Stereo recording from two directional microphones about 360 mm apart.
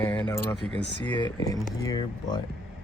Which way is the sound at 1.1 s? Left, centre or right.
Centre.